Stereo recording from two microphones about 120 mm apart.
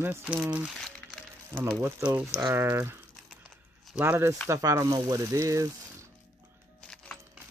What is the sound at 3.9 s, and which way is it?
Speech, 15° right (ahead or behind).